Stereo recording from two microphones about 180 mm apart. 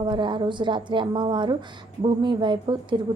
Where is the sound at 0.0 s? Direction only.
25° right (ahead or behind).